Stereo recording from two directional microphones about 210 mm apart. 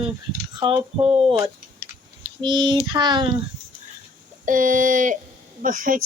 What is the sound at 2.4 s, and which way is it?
Speech, 20° right (ahead or behind).